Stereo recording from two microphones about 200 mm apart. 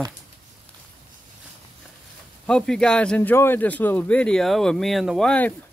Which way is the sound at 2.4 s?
5° left (ahead or behind).